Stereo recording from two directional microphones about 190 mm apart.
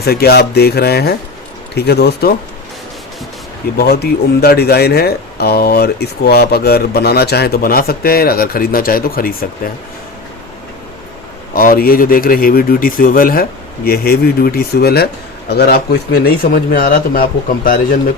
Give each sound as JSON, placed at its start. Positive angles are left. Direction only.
{"t": 0.0, "sound": "speech", "side_deg": 55}
{"t": 3.8, "sound": "speech", "side_deg": 55}
{"t": 11.5, "sound": "speech", "side_deg": 50}